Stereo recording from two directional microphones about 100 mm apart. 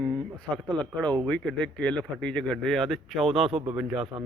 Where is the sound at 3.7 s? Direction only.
10° right (ahead or behind).